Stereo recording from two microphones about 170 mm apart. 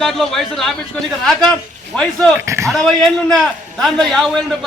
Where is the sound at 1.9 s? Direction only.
5° left (ahead or behind).